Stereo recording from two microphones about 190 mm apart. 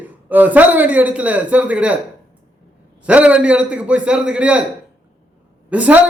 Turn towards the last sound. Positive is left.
turn(degrees=-10)  # may be behind; listen again after turning